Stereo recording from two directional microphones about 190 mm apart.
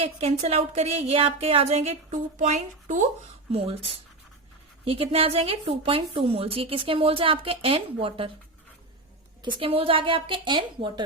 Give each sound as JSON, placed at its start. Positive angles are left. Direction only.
{"t": 0.0, "sound": "a woman's voice", "side_deg": -35}
{"t": 4.9, "sound": "a woman's voice", "side_deg": -30}
{"t": 9.4, "sound": "a woman's voice", "side_deg": -25}